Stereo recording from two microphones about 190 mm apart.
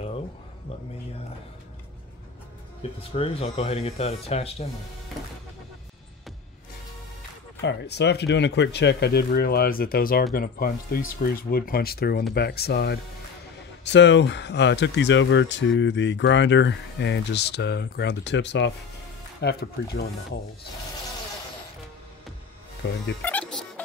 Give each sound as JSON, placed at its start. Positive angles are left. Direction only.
{"t": 3.0, "sound": "speech", "side_deg": 30}
{"t": 7.6, "sound": "speech", "side_deg": 65}
{"t": 13.8, "sound": "speech", "side_deg": 70}
{"t": 19.4, "sound": "speech", "side_deg": 60}
{"t": 23.2, "sound": "music", "side_deg": 5}